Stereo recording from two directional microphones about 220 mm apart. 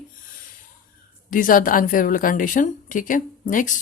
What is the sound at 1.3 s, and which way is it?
A woman's voice, 40° left (ahead or behind).